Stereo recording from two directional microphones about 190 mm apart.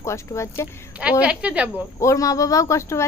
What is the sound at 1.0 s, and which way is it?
Speech, 5° right (ahead or behind).